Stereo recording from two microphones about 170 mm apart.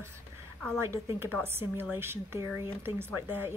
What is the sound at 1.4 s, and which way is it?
A woman's voice, 15° right (ahead or behind).